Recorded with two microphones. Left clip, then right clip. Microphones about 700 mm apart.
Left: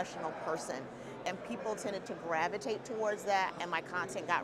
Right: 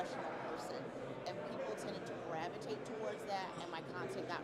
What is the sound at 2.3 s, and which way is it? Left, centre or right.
A woman's voice, left.